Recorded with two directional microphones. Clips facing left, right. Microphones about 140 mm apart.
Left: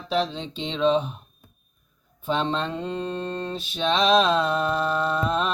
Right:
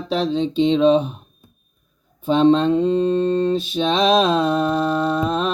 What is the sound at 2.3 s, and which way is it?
Mantra, 40° right (ahead or behind).